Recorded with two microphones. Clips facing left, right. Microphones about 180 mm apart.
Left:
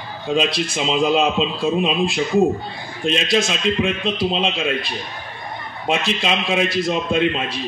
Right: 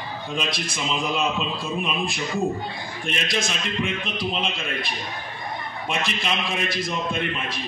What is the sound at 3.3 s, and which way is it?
A man's voice, 90° left.